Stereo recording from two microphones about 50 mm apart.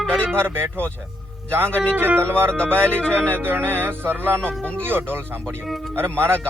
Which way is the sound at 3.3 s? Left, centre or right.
Right.